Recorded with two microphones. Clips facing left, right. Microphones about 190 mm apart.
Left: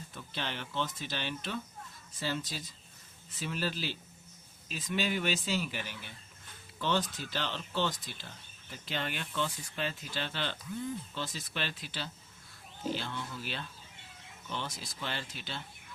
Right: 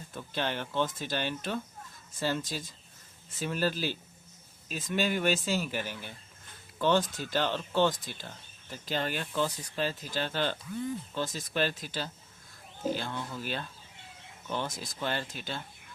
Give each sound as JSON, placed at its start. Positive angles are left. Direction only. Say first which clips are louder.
{"t": 0.1, "sound": "speech", "louder": "right 7 dB", "side_deg": -50}